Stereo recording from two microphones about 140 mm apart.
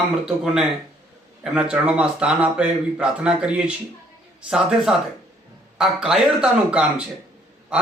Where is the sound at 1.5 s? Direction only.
5° right (ahead or behind).